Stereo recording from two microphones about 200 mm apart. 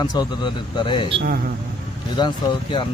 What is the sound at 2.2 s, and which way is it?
Speech, 20° left (ahead or behind).